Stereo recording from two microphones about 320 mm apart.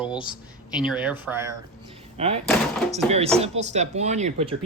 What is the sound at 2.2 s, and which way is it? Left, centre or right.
Speech, centre.